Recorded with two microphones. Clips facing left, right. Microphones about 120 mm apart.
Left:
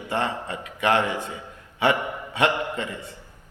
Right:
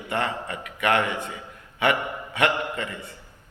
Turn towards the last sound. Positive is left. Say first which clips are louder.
# left 1 dB
turn(degrees=25)  # may be behind; listen again after turning